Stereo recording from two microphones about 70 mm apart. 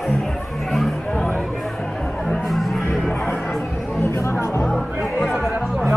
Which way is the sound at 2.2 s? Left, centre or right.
Centre.